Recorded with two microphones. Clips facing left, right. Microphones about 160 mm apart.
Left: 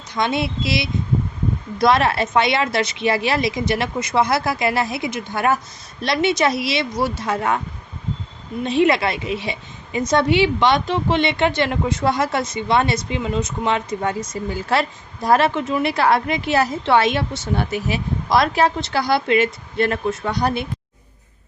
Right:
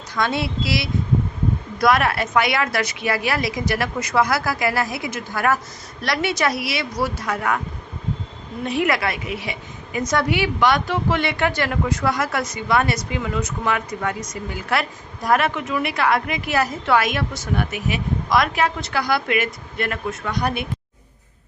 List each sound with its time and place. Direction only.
0.1 s a woman's voice: 20° left (ahead or behind)
8.6 s a woman's voice: 25° left (ahead or behind)